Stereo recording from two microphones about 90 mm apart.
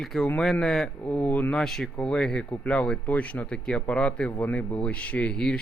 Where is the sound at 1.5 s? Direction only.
5° left (ahead or behind).